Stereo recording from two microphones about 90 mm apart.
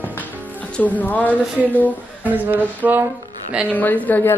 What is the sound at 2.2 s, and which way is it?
Speech, 20° right (ahead or behind).